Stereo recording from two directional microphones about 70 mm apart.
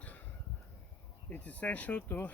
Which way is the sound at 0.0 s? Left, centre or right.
Left.